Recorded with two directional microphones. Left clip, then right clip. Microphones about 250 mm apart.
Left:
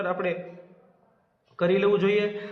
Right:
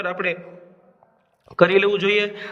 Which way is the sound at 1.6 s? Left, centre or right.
Right.